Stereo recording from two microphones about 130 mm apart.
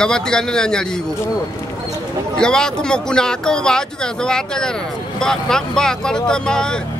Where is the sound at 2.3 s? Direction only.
5° left (ahead or behind).